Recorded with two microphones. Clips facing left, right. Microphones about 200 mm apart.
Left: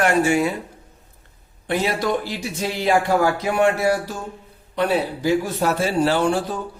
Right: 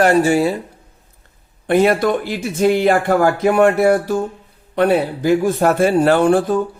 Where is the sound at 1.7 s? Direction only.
55° right (ahead or behind).